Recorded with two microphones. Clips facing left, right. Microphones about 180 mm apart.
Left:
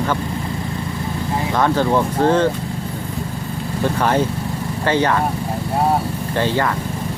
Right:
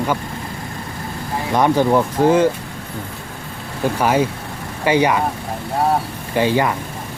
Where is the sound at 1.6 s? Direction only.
15° right (ahead or behind).